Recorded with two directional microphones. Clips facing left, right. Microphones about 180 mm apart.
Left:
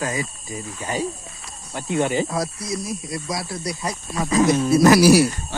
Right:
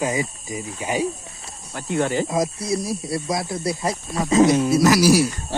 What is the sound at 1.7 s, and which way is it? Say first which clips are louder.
Speech: even; 20° left (ahead or behind).